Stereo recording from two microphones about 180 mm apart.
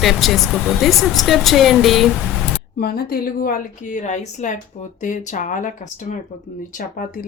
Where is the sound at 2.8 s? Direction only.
60° left (ahead or behind).